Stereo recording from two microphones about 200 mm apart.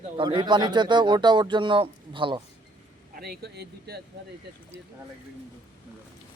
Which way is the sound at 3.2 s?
55° right (ahead or behind).